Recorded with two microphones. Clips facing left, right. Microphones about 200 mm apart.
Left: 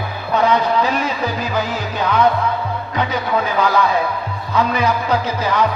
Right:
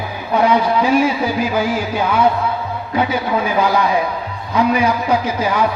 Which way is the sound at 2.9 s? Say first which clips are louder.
Right 3 dB; 10° right (ahead or behind).